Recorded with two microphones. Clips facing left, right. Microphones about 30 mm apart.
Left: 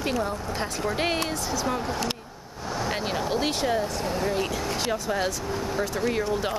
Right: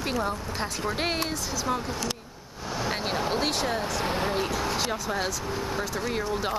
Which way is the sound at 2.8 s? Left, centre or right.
Centre.